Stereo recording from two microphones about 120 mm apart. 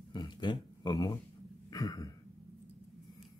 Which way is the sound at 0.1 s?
40° left (ahead or behind).